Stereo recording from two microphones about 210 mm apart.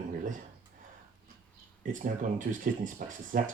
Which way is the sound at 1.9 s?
40° right (ahead or behind).